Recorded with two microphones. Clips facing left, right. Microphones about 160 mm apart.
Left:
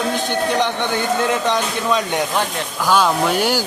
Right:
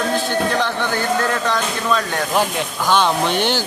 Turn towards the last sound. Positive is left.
turn(degrees=5)  # may be behind; listen again after turning